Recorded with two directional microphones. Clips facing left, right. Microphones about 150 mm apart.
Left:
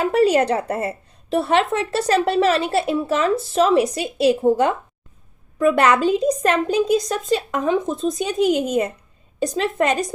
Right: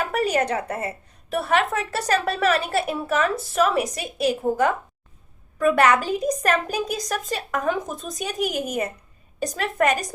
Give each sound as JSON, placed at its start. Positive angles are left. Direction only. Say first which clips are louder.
{"t": 0.0, "sound": "a woman's voice", "louder": "left 6 dB", "side_deg": 30}